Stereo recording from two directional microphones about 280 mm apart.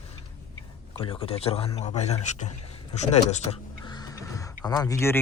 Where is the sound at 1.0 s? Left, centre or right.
Centre.